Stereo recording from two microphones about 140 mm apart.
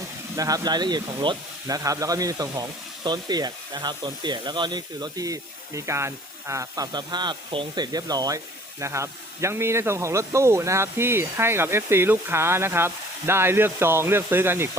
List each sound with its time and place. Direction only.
0.3 s speech: 25° right (ahead or behind)